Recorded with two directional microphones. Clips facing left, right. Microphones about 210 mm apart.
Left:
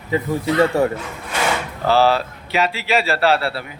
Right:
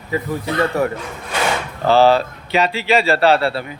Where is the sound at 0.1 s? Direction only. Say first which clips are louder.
Left 2 dB; 25° left (ahead or behind).